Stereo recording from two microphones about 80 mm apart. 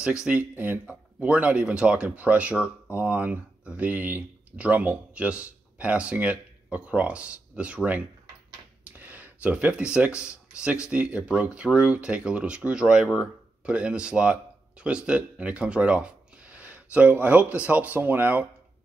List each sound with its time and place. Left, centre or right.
0.0 s speech: centre